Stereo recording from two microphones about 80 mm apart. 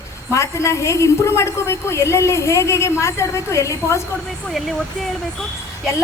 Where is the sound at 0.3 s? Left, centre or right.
Left.